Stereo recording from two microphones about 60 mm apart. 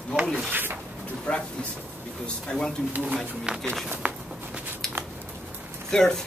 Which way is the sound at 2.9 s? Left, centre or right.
Right.